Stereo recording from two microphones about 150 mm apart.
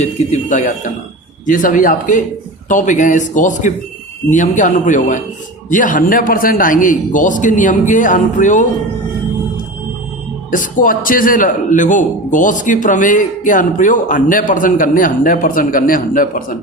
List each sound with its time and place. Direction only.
0.0 s a man's voice: 50° left (ahead or behind)
10.5 s a man's voice: 65° left (ahead or behind)